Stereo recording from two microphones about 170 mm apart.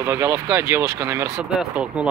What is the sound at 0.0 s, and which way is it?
Speech, 15° right (ahead or behind).